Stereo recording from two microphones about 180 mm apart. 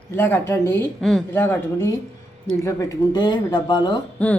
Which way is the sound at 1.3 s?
15° left (ahead or behind).